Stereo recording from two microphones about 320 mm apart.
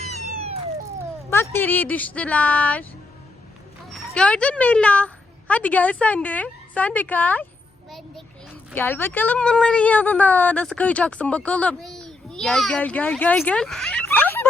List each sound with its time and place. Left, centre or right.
0.0 s cat: right
1.3 s a woman's voice: centre
3.9 s a woman's voice: centre